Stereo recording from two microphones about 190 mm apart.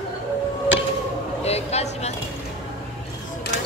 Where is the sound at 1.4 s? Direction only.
35° left (ahead or behind).